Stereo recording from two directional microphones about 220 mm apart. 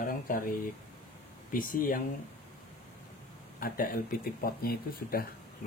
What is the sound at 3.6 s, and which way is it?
Speech, 40° left (ahead or behind).